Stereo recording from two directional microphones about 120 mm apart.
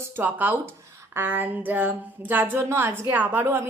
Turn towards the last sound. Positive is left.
turn(degrees=-15)  # may be behind; listen again after turning